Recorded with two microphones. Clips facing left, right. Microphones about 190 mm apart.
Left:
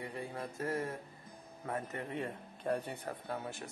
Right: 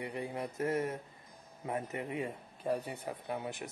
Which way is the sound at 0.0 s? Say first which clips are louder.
Right 3 dB; 20° right (ahead or behind).